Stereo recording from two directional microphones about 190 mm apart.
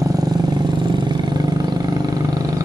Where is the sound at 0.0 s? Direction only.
20° right (ahead or behind).